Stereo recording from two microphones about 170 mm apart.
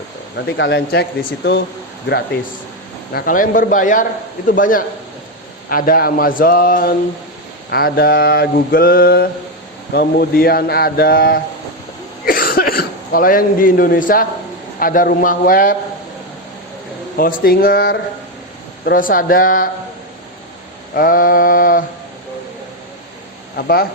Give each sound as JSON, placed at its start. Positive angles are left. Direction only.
{"t": 0.3, "sound": "speech", "side_deg": 90}
{"t": 3.1, "sound": "a man's voice", "side_deg": 60}
{"t": 5.6, "sound": "mantra", "side_deg": 55}
{"t": 12.2, "sound": "speech", "side_deg": 60}
{"t": 14.8, "sound": "mantra", "side_deg": 55}
{"t": 17.2, "sound": "mantra", "side_deg": 60}
{"t": 20.9, "sound": "mantra", "side_deg": 55}
{"t": 23.6, "sound": "mantra", "side_deg": 65}